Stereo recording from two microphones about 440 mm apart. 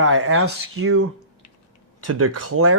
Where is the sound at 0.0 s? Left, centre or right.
Right.